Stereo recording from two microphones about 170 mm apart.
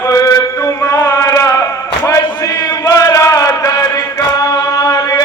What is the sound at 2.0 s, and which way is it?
Chant, 20° left (ahead or behind).